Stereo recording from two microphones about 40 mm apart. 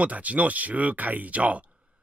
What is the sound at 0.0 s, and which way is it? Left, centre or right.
Speech, right.